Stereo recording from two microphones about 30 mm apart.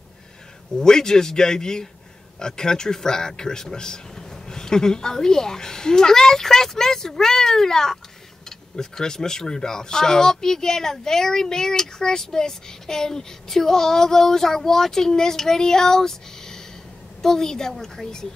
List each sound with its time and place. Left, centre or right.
0.7 s a man's voice: left